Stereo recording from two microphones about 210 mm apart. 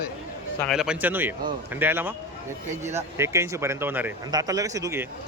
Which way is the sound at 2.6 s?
35° right (ahead or behind).